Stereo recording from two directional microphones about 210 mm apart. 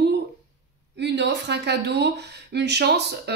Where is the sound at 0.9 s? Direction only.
55° right (ahead or behind).